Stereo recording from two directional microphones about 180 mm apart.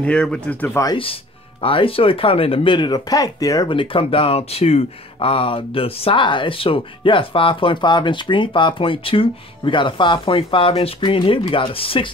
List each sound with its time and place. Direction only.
0.0 s speech: 5° left (ahead or behind)
0.8 s speech: 30° left (ahead or behind)